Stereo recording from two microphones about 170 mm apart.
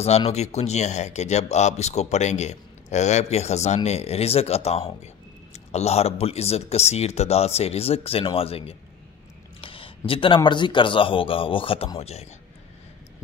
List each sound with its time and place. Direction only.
0.3 s speech: 40° left (ahead or behind)